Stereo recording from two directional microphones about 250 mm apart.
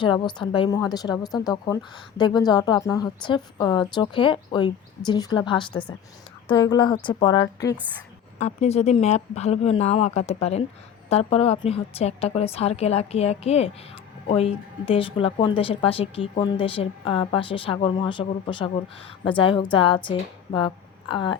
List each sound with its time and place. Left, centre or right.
0.0 s a woman's voice: centre
8.4 s a woman's voice: left